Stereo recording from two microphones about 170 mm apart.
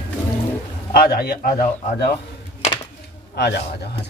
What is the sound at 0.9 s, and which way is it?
A man's voice, 65° left (ahead or behind).